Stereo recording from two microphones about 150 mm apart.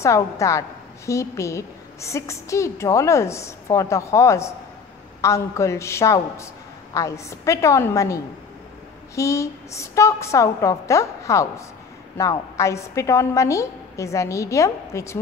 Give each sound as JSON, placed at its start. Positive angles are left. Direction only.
{"t": 0.0, "sound": "a woman's voice", "side_deg": 20}